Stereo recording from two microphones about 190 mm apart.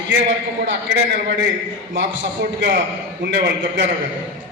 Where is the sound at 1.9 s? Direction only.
75° right (ahead or behind).